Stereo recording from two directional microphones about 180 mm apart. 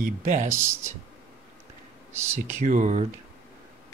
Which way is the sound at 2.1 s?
15° right (ahead or behind).